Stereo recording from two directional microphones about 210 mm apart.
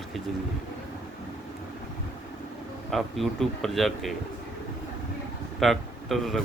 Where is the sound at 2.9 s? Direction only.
Centre (ahead or behind).